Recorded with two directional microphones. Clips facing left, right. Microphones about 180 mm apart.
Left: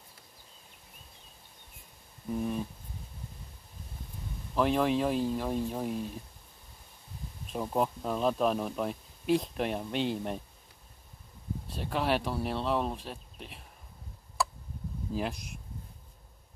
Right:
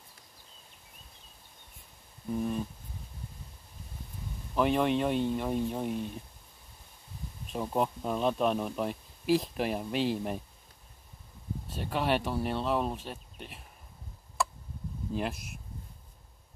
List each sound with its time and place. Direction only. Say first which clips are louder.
2.3 s a sound: right 1 dB; 5° left (ahead or behind)
4.6 s speech: even; centre (ahead or behind)
7.4 s speech: even; centre (ahead or behind)
11.6 s speech: even; centre (ahead or behind)
14.4 s tick: even; centre (ahead or behind)
15.1 s speech: even; centre (ahead or behind)